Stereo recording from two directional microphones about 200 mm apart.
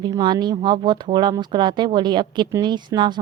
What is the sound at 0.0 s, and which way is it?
Speech, 20° right (ahead or behind).